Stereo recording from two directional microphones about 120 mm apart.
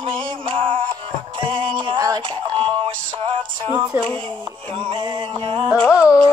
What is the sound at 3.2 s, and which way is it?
Speech, 40° right (ahead or behind).